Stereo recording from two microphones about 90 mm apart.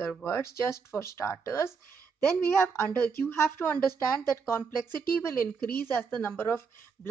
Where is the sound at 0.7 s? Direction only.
30° left (ahead or behind).